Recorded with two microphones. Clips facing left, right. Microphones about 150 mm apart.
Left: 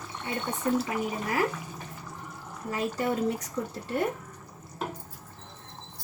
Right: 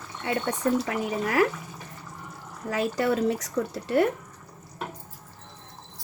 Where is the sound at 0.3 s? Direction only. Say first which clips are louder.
Right 4 dB; 80° right.